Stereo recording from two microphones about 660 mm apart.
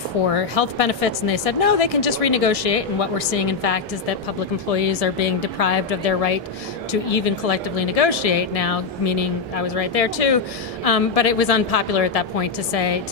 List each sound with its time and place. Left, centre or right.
0.3 s speech: left